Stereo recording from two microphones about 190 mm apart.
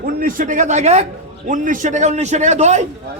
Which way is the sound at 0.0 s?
50° right (ahead or behind).